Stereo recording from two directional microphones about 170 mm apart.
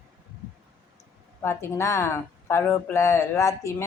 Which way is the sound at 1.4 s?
15° left (ahead or behind).